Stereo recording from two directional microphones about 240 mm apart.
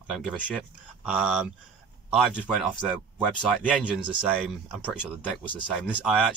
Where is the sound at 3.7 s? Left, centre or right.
Centre.